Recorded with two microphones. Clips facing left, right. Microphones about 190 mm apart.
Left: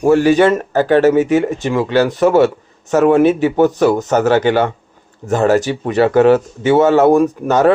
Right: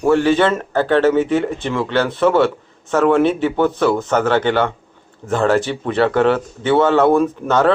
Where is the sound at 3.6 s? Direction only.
40° left (ahead or behind).